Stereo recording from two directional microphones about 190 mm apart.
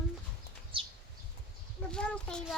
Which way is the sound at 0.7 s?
30° right (ahead or behind).